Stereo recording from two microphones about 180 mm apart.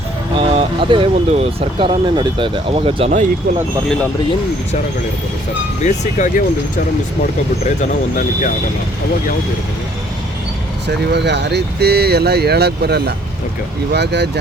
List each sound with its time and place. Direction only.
0.3 s speech: 30° right (ahead or behind)
5.8 s speech: 45° left (ahead or behind)
10.8 s speech: 70° right (ahead or behind)